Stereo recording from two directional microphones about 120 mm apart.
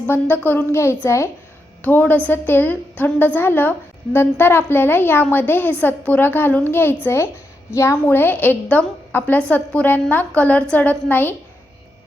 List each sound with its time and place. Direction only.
0.1 s a woman's voice: 15° left (ahead or behind)